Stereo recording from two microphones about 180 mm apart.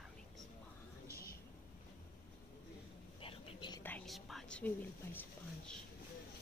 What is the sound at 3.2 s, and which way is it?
Whispering, 30° left (ahead or behind).